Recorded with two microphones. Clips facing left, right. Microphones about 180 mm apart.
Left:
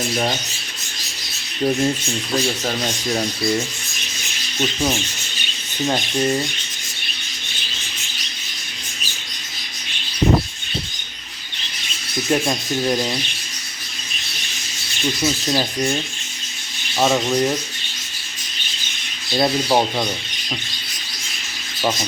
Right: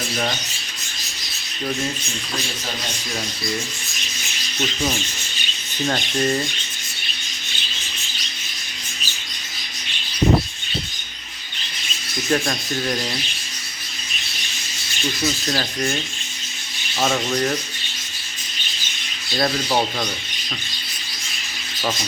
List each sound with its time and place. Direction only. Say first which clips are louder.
5.8 s rub: left 2 dB; 15° left (ahead or behind)
12.3 s rub: left 1 dB; 20° left (ahead or behind)
15.4 s rub: left 3 dB; 15° left (ahead or behind)
17.0 s rub: left 3 dB; 15° left (ahead or behind)
19.4 s rub: left 3 dB; 20° left (ahead or behind)